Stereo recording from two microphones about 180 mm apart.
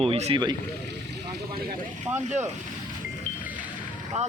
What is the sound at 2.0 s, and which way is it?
Speech, 40° right (ahead or behind).